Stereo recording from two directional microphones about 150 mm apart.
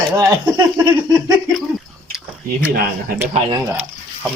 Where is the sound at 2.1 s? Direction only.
10° right (ahead or behind).